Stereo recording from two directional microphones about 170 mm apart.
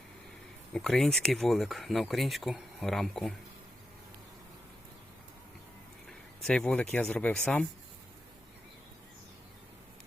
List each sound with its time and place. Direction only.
0.7 s speech: centre (ahead or behind)
6.1 s a sound: 5° left (ahead or behind)
6.9 s speech: 10° left (ahead or behind)